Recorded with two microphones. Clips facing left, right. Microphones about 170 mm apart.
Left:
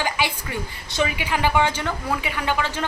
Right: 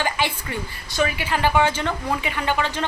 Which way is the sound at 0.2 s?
10° left (ahead or behind).